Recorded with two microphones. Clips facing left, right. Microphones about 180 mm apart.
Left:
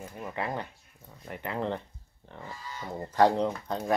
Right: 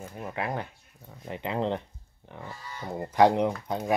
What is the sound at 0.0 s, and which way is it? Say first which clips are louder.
Speech: right 1 dB; 10° right (ahead or behind).